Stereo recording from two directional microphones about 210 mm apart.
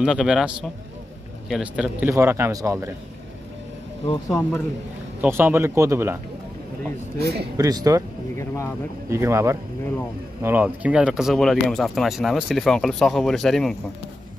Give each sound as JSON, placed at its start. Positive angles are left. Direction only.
{"t": 0.0, "sound": "speech", "side_deg": -5}
{"t": 4.0, "sound": "speech", "side_deg": 20}
{"t": 4.4, "sound": "speech", "side_deg": 10}
{"t": 5.2, "sound": "speech", "side_deg": -10}
{"t": 7.2, "sound": "speech", "side_deg": -50}
{"t": 7.5, "sound": "speech", "side_deg": -15}
{"t": 8.4, "sound": "speech", "side_deg": 15}
{"t": 9.1, "sound": "speech", "side_deg": -15}